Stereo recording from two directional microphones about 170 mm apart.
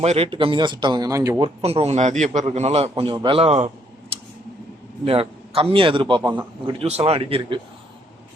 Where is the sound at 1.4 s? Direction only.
35° right (ahead or behind).